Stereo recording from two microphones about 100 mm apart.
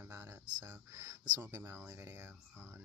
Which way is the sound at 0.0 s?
15° right (ahead or behind).